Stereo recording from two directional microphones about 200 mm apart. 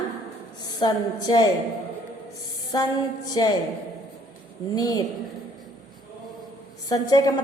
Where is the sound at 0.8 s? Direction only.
20° left (ahead or behind).